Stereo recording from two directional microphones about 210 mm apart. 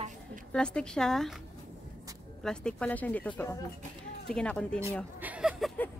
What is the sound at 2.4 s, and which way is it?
Speech, 5° left (ahead or behind).